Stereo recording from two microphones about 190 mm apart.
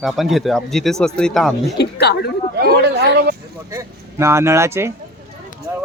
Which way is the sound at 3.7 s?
15° right (ahead or behind).